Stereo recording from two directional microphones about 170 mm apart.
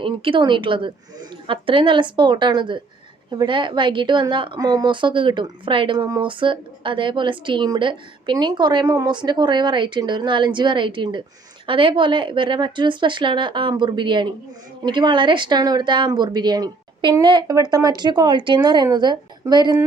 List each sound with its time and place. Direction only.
0.0 s a woman's voice: 30° right (ahead or behind)